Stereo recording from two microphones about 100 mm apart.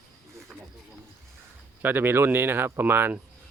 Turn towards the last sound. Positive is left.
turn(degrees=-20)  # may be behind; listen again after turning